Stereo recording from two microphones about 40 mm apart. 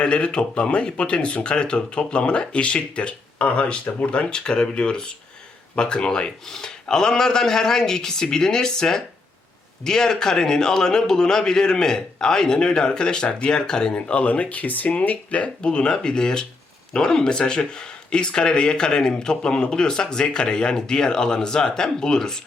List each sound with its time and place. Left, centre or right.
0.0 s speech: left
4.3 s a man's voice: left
13.9 s speech: left; by 22.4 s centre